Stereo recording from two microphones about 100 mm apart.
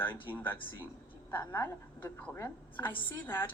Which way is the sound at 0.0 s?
20° left (ahead or behind).